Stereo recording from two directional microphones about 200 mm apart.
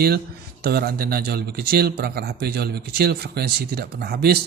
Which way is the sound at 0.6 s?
50° right (ahead or behind).